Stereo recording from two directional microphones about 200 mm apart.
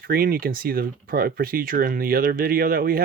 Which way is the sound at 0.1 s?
45° right (ahead or behind).